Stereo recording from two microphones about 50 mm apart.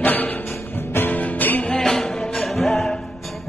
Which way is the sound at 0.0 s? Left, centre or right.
Left.